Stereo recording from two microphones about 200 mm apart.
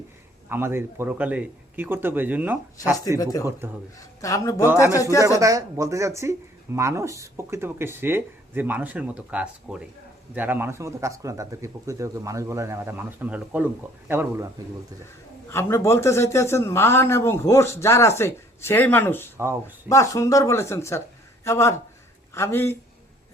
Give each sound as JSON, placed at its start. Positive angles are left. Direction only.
{"t": 0.4, "sound": "speech", "side_deg": -10}
{"t": 3.9, "sound": "a man's voice", "side_deg": 15}
{"t": 4.7, "sound": "speech", "side_deg": -10}
{"t": 15.4, "sound": "a man's voice", "side_deg": 15}
{"t": 19.4, "sound": "speech", "side_deg": -15}
{"t": 19.9, "sound": "a man's voice", "side_deg": 15}